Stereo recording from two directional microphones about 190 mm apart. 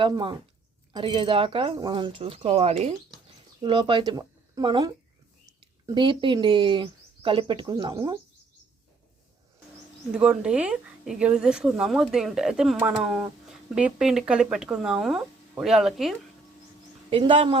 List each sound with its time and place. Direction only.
0.0 s speech: 25° right (ahead or behind)
10.1 s a woman's voice: 5° right (ahead or behind)
17.1 s speech: 25° right (ahead or behind)